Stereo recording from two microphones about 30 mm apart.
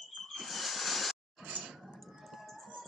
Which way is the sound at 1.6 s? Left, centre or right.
Centre.